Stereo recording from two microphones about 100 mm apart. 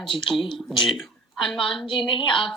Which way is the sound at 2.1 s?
55° left (ahead or behind).